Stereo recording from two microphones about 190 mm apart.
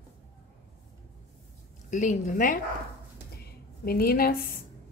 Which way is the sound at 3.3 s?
55° left (ahead or behind).